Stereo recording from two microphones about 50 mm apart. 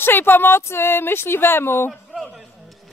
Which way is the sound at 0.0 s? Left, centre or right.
Left.